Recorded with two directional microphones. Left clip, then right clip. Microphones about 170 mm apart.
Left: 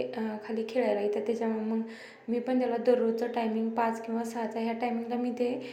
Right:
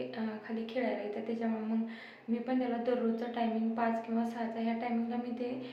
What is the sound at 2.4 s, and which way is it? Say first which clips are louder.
Speech: left 7 dB; 35° left (ahead or behind).